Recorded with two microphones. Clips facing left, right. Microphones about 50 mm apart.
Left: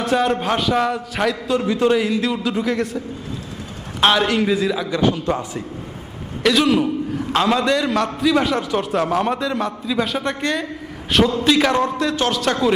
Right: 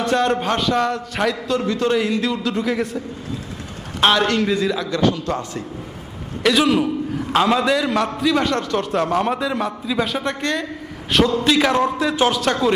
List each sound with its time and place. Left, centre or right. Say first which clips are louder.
0.0 s a man's voice: even; centre
4.0 s a man's voice: even; centre
6.4 s a man's voice: even; centre